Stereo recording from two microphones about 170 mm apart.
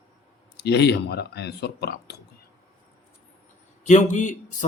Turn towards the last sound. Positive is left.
turn(degrees=45)  # may be behind; listen again after turning